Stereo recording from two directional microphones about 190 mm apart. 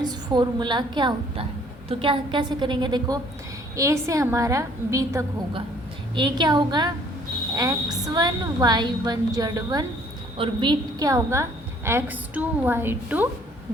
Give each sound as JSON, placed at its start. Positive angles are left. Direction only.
{"t": 0.0, "sound": "a woman's voice", "side_deg": -20}